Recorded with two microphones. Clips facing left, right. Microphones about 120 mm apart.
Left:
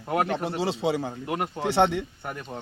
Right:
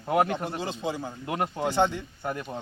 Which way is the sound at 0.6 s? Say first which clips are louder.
Left 5 dB; 85° left.